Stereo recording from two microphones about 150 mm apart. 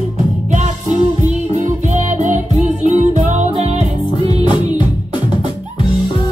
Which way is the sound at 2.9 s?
50° right (ahead or behind).